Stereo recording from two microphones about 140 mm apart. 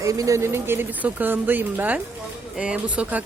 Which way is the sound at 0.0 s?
25° right (ahead or behind).